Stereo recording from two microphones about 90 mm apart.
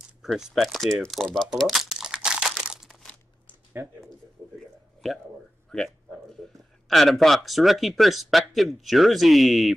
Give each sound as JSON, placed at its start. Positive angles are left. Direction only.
{"t": 0.2, "sound": "speech", "side_deg": -5}
{"t": 1.5, "sound": "crumpling", "side_deg": -5}
{"t": 3.8, "sound": "speech", "side_deg": -30}
{"t": 5.0, "sound": "speech", "side_deg": 0}
{"t": 5.7, "sound": "a sound", "side_deg": 5}
{"t": 6.9, "sound": "speech", "side_deg": 0}